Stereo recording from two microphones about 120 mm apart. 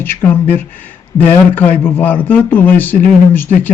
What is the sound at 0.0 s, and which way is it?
Speech, 15° left (ahead or behind).